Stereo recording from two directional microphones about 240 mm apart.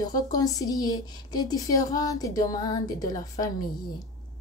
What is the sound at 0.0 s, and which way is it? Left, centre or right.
Speech, centre.